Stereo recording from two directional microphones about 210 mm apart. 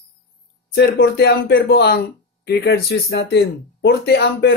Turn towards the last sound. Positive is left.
turn(degrees=50)  # may be behind; listen again after turning